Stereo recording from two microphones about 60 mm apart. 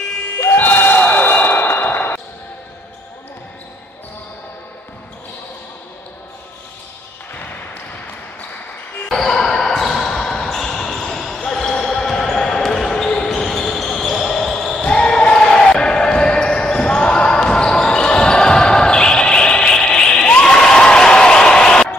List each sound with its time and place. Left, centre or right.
0.4 s slam: left
9.1 s basketball bounce: centre